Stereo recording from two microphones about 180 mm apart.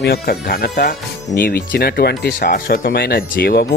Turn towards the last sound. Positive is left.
turn(degrees=55)  # may be behind; listen again after turning